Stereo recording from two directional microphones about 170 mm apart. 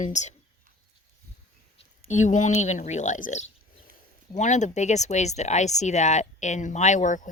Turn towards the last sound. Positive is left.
turn(degrees=45)  # may be behind; listen again after turning